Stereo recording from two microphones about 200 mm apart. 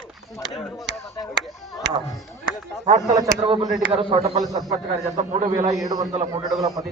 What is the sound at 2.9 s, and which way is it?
A man's voice, 35° right (ahead or behind).